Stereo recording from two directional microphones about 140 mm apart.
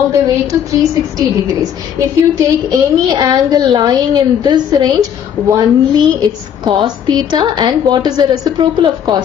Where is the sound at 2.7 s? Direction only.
30° right (ahead or behind).